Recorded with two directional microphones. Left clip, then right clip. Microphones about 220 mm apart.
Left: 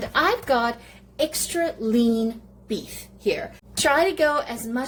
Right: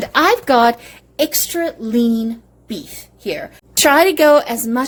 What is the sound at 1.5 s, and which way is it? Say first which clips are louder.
Speech: right 3 dB; 30° right (ahead or behind).